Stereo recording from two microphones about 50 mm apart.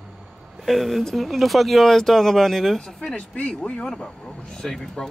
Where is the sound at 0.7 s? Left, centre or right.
Centre.